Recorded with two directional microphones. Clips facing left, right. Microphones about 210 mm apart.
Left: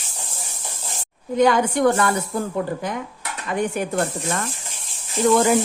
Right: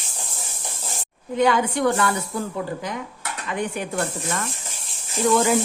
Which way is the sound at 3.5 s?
40° left (ahead or behind).